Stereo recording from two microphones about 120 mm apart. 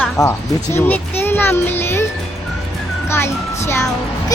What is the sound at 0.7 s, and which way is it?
Speech, 15° left (ahead or behind).